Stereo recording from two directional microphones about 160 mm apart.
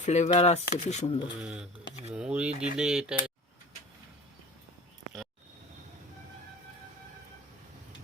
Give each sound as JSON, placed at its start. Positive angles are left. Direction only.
{"t": 0.0, "sound": "speech", "side_deg": 45}
{"t": 1.4, "sound": "speech", "side_deg": -5}